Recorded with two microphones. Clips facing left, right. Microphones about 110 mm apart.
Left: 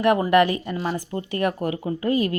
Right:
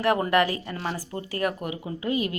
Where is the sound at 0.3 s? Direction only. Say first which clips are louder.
Left 5 dB; 20° left (ahead or behind).